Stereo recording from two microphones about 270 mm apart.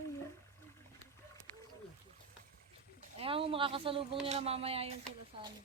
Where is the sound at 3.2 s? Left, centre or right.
Centre.